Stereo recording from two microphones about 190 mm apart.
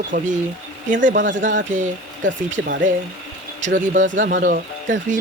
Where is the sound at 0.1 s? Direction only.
40° right (ahead or behind).